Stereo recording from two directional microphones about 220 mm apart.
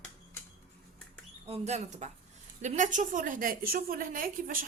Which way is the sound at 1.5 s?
30° right (ahead or behind).